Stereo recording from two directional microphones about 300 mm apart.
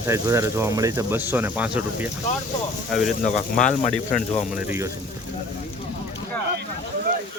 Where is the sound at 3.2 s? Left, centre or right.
Left.